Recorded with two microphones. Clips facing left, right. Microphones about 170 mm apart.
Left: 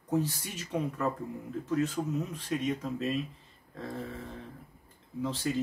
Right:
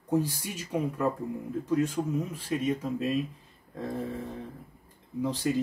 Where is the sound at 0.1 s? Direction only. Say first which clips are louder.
Right 2 dB; 10° right (ahead or behind).